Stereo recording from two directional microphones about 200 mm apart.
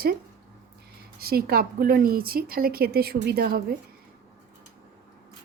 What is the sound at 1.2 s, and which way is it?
A woman's voice, 50° right (ahead or behind).